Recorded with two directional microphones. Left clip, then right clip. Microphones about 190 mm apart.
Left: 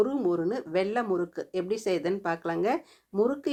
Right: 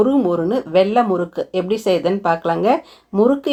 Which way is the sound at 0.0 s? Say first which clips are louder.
Right 10 dB; 30° left (ahead or behind).